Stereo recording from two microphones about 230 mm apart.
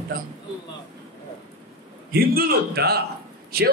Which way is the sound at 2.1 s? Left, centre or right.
Right.